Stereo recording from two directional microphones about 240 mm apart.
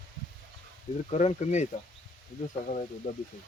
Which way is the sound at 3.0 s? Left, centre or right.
Left.